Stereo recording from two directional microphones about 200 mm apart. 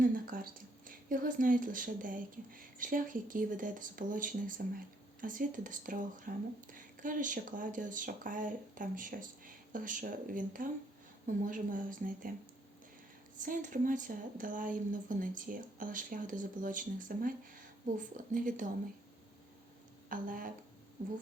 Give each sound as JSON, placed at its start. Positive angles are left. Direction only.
{"t": 0.0, "sound": "a sound", "side_deg": -45}
{"t": 0.9, "sound": "speech", "side_deg": -45}
{"t": 13.4, "sound": "speech", "side_deg": -40}
{"t": 20.1, "sound": "speech", "side_deg": -45}